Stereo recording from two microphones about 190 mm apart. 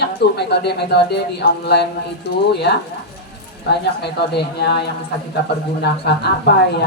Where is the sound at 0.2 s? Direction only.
60° left (ahead or behind).